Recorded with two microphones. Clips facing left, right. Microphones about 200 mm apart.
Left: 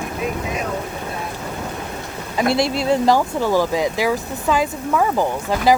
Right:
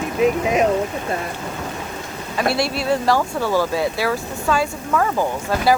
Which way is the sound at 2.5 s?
20° left (ahead or behind).